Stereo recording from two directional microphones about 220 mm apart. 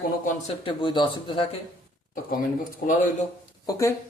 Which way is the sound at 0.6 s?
20° left (ahead or behind).